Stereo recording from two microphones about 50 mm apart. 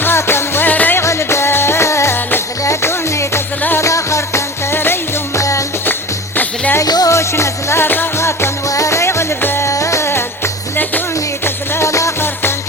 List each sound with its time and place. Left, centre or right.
0.0 s music: left
0.7 s music: left
1.0 s music: left
3.8 s music: left
4.7 s music: left
5.3 s music: left
5.8 s music: left
6.7 s music: left
7.9 s music: left
8.2 s music: left
9.6 s music: left
10.1 s music: left
11.9 s music: left
12.2 s music: left